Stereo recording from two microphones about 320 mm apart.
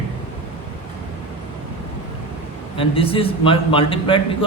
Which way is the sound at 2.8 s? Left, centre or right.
Centre.